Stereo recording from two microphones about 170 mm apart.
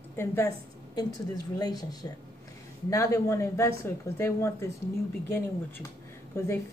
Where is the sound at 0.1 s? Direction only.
15° left (ahead or behind).